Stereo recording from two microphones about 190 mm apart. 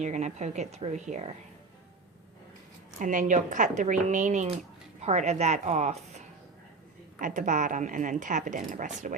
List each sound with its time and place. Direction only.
0.0 s speech: 40° right (ahead or behind)
3.0 s speech: 40° right (ahead or behind)